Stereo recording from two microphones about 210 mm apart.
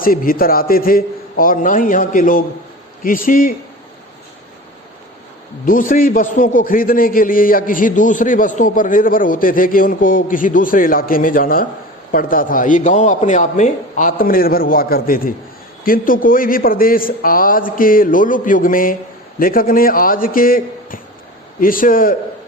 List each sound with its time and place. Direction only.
0.0 s a man's voice: 45° left (ahead or behind)
5.9 s a man's voice: 40° left (ahead or behind)